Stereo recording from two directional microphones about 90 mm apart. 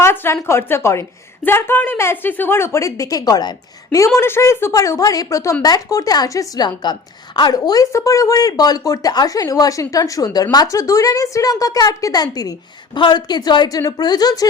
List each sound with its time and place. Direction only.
0.0 s a sound: 25° left (ahead or behind)
0.4 s a woman's voice: 30° left (ahead or behind); by 3.5 s 45° left (ahead or behind)
3.9 s a woman's voice: 30° left (ahead or behind)
13.0 s speech: 55° left (ahead or behind)